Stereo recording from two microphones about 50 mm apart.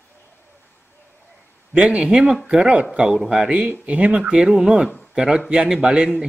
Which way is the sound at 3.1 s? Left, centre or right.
Centre.